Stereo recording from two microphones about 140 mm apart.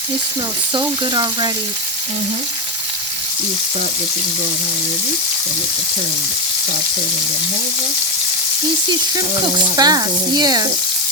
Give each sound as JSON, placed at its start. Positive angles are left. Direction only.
{"t": 0.7, "sound": "frying", "side_deg": -30}
{"t": 9.1, "sound": "frying", "side_deg": -25}